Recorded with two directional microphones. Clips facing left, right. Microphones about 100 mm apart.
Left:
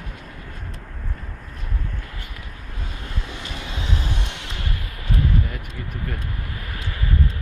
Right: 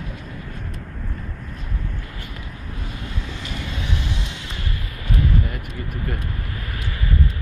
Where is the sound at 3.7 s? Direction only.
40° left (ahead or behind).